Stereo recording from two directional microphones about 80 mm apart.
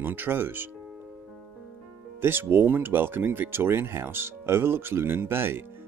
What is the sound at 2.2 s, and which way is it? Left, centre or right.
Speech, right.